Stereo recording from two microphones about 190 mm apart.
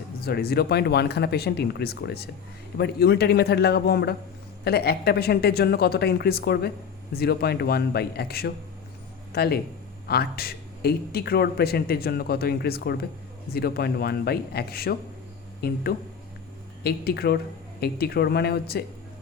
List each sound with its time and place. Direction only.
0.2 s speech: 55° left (ahead or behind)